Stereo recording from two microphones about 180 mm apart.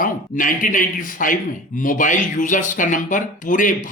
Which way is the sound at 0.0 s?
45° left (ahead or behind).